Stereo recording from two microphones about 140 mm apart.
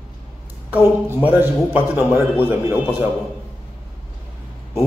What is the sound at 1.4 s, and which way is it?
Speech, 15° right (ahead or behind).